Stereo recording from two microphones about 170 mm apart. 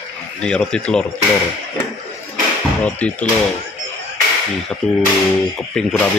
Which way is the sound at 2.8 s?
10° left (ahead or behind).